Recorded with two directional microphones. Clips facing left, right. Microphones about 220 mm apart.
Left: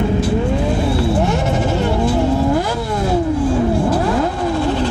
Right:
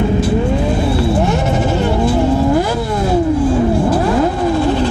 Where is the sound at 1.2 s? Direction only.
5° right (ahead or behind).